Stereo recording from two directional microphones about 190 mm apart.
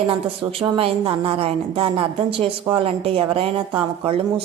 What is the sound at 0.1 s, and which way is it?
Speech, 30° right (ahead or behind).